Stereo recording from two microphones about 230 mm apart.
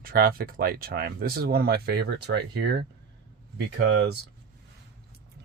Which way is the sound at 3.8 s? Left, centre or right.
Right.